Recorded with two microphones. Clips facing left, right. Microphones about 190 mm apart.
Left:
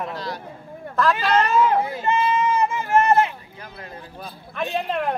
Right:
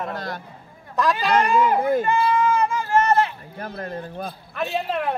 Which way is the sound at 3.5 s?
50° right (ahead or behind).